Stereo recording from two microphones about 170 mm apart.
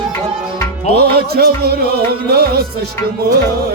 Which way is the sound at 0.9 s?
65° right (ahead or behind).